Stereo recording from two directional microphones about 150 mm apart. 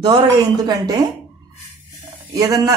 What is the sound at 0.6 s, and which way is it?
Speech, 25° right (ahead or behind).